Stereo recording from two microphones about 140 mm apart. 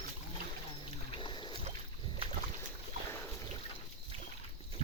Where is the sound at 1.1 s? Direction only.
35° left (ahead or behind).